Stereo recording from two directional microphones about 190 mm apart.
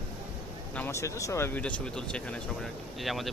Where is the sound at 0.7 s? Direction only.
10° left (ahead or behind).